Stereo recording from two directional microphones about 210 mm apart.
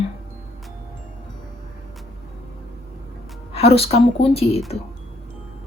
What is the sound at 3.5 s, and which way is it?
Speech, 30° left (ahead or behind).